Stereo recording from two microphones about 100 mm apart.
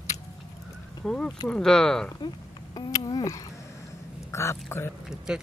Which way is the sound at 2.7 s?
40° left (ahead or behind).